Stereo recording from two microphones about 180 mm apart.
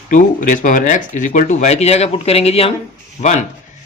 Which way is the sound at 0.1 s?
45° left (ahead or behind).